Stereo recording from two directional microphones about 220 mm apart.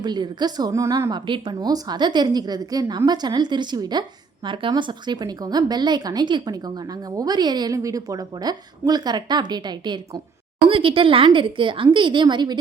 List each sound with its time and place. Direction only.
0.0 s a woman's voice: 20° right (ahead or behind)